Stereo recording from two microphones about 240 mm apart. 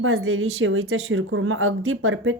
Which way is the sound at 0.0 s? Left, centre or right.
Right.